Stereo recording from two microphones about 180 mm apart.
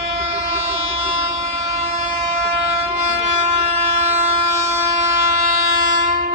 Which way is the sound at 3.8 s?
40° right (ahead or behind).